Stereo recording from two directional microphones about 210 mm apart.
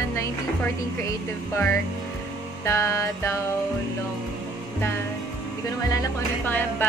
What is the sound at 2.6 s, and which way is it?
Speech, 15° left (ahead or behind).